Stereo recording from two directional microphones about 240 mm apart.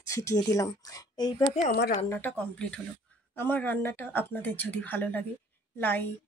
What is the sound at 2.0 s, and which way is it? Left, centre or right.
A woman's voice, centre.